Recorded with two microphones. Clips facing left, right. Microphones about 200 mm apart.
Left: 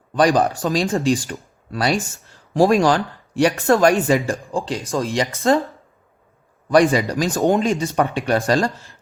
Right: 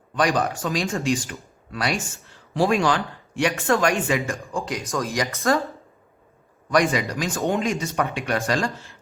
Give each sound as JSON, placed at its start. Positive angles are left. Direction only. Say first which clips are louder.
{"t": 0.2, "sound": "speech", "louder": "left 6 dB", "side_deg": 35}
{"t": 6.7, "sound": "speech", "louder": "left 6 dB", "side_deg": 30}